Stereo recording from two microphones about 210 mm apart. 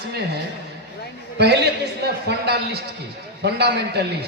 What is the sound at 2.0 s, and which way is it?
A man's voice, 50° right (ahead or behind).